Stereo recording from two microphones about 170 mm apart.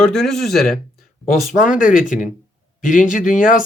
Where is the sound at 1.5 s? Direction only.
50° left (ahead or behind).